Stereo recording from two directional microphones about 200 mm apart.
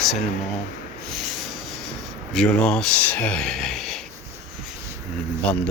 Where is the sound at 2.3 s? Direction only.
5° left (ahead or behind).